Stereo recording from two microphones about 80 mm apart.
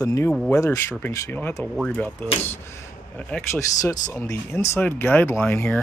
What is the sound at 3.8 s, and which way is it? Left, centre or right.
Speech, left.